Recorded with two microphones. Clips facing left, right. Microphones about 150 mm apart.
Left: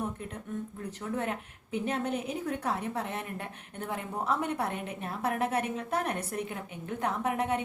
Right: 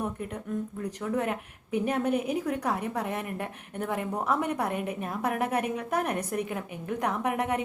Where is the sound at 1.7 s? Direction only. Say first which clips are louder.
Right 5 dB; 10° right (ahead or behind).